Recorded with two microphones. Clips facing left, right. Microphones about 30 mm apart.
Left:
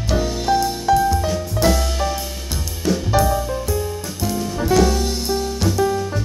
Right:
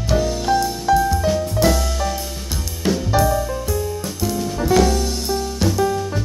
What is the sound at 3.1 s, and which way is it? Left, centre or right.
Music, centre.